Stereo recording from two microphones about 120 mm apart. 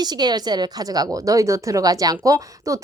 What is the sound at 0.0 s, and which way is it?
A woman's voice, 35° right (ahead or behind).